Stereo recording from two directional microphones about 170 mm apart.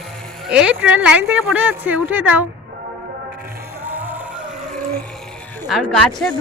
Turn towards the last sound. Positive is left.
turn(degrees=0)  # may be behind; listen again after turning